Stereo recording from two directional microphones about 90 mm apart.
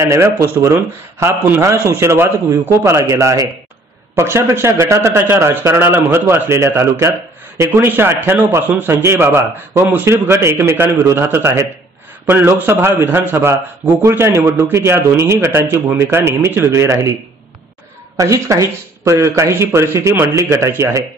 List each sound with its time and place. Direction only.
0.0 s a man's voice: 30° right (ahead or behind)
18.1 s speech: 35° right (ahead or behind)